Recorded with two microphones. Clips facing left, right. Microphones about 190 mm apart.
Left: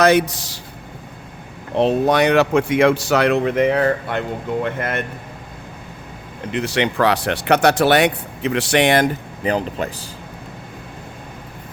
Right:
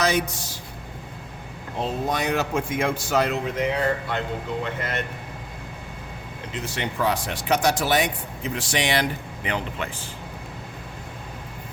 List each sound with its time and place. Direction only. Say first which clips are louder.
0.0 s speech: left 9 dB; 65° left (ahead or behind); by 0.6 s 90° left
1.7 s a man's voice: left 10 dB; 70° left (ahead or behind); by 5.0 s 55° left (ahead or behind)
6.5 s speech: left 10 dB; 70° left (ahead or behind); by 9.9 s 40° left (ahead or behind)